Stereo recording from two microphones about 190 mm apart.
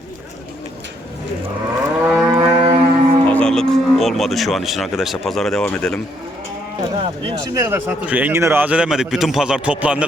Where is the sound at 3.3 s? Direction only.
5° left (ahead or behind).